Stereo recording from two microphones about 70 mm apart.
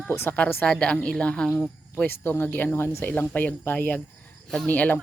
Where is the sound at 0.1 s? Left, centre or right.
Left.